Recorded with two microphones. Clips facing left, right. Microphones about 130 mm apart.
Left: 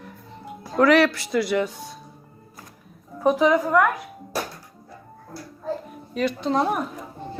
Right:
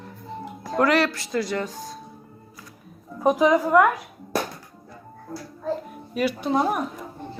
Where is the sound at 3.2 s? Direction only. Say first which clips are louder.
Even; 15° right (ahead or behind).